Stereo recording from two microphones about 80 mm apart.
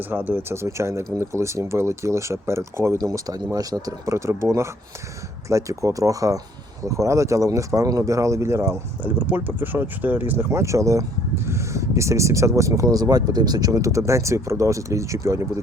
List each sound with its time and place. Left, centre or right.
0.1 s speech: right
3.0 s speech: right
9.1 s speech: right
10.5 s speech: right